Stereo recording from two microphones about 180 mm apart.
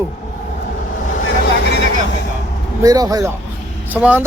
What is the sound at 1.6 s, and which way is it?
Vehicle, 70° left (ahead or behind).